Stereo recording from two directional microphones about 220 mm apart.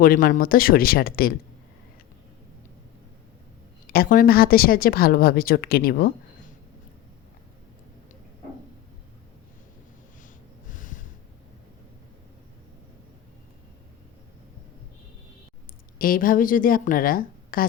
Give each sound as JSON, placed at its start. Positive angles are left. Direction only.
{"t": 0.0, "sound": "speech", "side_deg": 40}
{"t": 3.8, "sound": "a woman's voice", "side_deg": 40}
{"t": 10.2, "sound": "snort", "side_deg": 35}
{"t": 16.0, "sound": "speech", "side_deg": 40}